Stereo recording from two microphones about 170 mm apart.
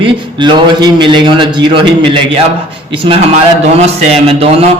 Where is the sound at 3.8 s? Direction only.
35° right (ahead or behind).